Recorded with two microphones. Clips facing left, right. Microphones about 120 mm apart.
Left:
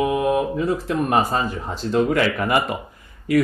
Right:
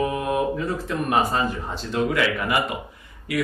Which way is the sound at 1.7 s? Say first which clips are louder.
Left 8 dB; 40° left (ahead or behind).